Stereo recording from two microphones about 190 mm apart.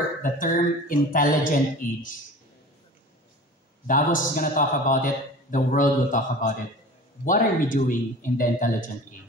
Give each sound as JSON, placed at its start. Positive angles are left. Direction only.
{"t": 0.2, "sound": "a man's voice", "side_deg": 45}
{"t": 3.8, "sound": "a man's voice", "side_deg": 45}